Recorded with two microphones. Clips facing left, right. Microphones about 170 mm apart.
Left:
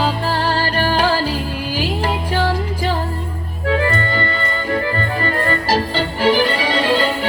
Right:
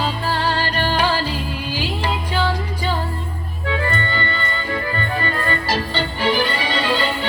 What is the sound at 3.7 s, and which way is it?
Music, 40° left (ahead or behind).